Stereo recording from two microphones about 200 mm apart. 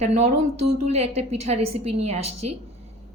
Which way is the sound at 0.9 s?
30° right (ahead or behind).